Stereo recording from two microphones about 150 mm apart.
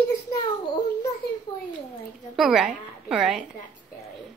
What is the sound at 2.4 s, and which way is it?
Speech, 5° right (ahead or behind).